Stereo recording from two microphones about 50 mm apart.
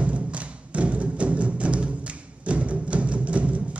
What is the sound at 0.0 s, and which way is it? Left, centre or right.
Music, right.